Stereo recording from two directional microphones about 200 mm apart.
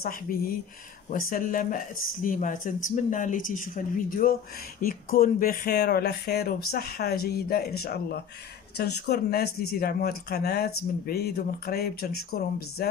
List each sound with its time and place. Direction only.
0.0 s speech: 45° left (ahead or behind)